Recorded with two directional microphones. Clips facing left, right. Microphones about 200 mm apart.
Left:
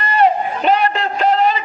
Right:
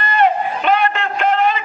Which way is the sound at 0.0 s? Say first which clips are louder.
Left 1 dB; 35° left (ahead or behind).